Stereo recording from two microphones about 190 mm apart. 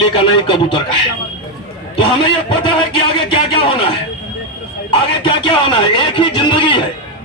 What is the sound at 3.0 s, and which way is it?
Speech, 25° left (ahead or behind).